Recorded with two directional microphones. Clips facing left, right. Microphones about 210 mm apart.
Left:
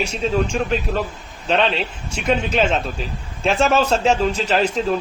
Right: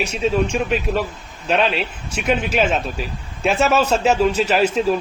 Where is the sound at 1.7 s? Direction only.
30° left (ahead or behind).